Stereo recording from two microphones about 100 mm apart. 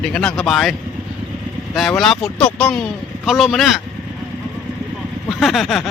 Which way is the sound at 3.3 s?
Centre (ahead or behind).